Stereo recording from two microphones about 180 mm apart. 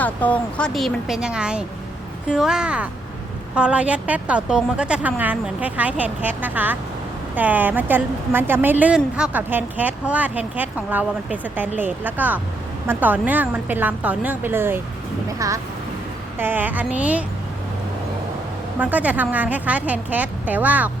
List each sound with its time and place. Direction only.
0.0 s speech: 10° left (ahead or behind); by 17.2 s 10° right (ahead or behind)
18.8 s speech: 10° right (ahead or behind)